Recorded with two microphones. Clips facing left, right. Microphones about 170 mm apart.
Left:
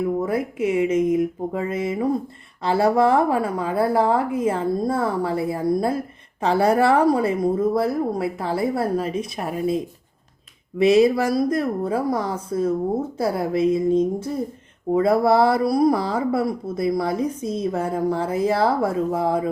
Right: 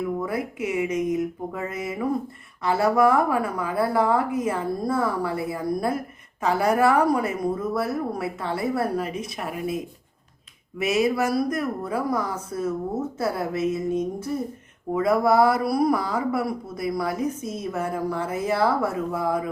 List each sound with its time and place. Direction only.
0.3 s a woman's voice: 25° left (ahead or behind)